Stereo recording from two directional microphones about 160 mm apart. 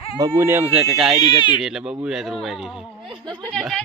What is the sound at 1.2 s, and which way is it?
Speech, 30° left (ahead or behind).